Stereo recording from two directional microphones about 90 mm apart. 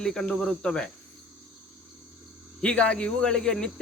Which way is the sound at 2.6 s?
10° left (ahead or behind).